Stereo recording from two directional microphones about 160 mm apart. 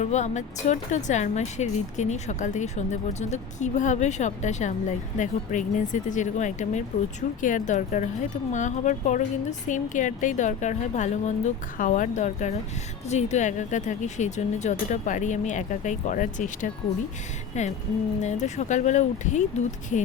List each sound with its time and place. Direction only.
0.0 s speech: 45° left (ahead or behind)